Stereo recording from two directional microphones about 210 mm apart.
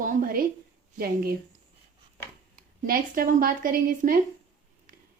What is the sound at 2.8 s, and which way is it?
Speech, 45° right (ahead or behind).